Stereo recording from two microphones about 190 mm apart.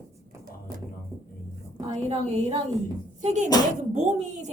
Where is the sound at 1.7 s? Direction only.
35° right (ahead or behind).